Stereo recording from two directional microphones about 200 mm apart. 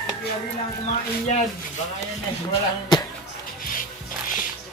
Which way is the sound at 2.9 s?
20° left (ahead or behind).